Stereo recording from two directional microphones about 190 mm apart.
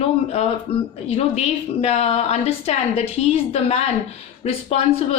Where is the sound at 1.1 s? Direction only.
35° left (ahead or behind).